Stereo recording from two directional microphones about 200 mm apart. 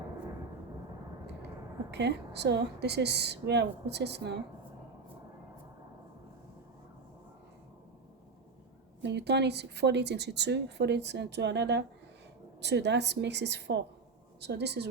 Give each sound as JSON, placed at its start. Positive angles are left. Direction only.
{"t": 1.9, "sound": "speech", "side_deg": -60}
{"t": 9.0, "sound": "speech", "side_deg": -60}